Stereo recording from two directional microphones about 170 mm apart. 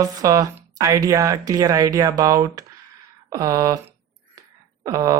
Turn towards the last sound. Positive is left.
turn(degrees=-20)  # may be behind; listen again after turning